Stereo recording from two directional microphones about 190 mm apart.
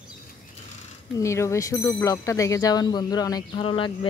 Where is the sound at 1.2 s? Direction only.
15° left (ahead or behind).